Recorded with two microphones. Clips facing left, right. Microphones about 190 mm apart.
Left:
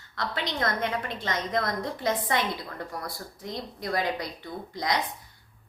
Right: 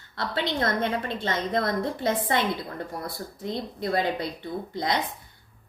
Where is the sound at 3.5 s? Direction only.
25° right (ahead or behind).